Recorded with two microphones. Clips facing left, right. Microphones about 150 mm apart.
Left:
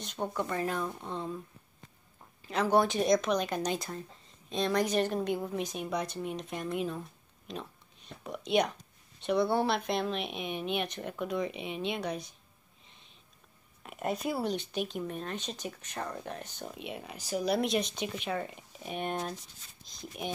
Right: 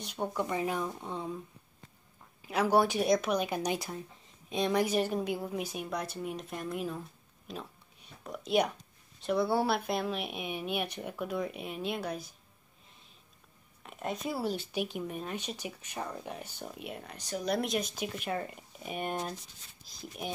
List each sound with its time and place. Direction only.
0.0 s a woman's voice: 10° right (ahead or behind)
2.4 s a woman's voice: 10° right (ahead or behind)
7.4 s a sound: 5° right (ahead or behind)
8.2 s speech: centre (ahead or behind)
13.8 s speech: 5° left (ahead or behind)